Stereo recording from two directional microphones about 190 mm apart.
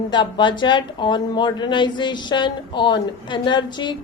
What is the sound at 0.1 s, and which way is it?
A woman's voice, 25° left (ahead or behind).